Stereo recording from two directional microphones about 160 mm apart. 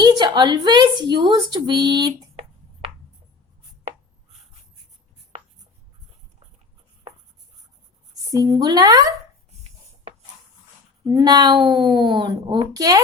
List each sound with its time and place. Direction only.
0.0 s a woman's voice: 25° right (ahead or behind)
8.3 s a woman's voice: 25° right (ahead or behind)
11.0 s a woman's voice: 25° right (ahead or behind)